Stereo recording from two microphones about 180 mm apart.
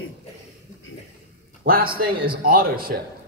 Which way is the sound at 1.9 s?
55° right (ahead or behind).